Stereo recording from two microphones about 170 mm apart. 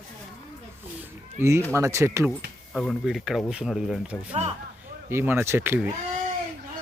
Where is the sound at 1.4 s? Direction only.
15° right (ahead or behind).